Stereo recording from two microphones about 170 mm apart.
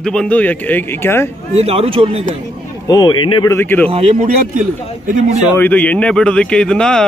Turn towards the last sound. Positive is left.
turn(degrees=5)  # may be behind; listen again after turning